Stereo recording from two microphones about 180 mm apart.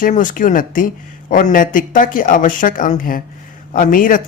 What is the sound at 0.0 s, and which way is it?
Speech, 45° left (ahead or behind).